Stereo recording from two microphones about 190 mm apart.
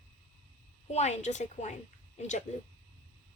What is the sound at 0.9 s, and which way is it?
A woman's voice, 35° left (ahead or behind).